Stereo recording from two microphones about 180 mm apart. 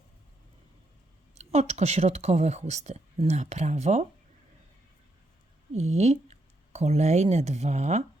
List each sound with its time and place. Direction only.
1.4 s speech: 35° right (ahead or behind)
5.7 s speech: 40° right (ahead or behind)